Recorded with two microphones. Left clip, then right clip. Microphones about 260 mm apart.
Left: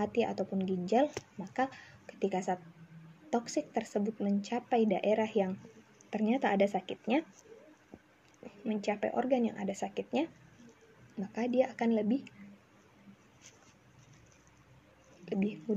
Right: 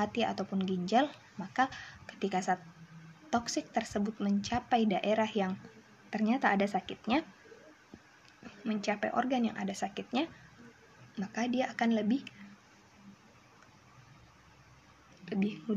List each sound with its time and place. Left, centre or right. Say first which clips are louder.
0.0 s speech: even; right
8.6 s speech: even; right
15.2 s speech: left 1 dB; right